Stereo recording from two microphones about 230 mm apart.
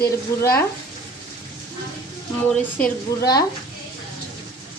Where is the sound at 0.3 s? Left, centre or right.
Centre.